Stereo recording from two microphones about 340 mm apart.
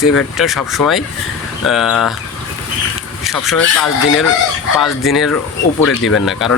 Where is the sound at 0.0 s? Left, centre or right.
Centre.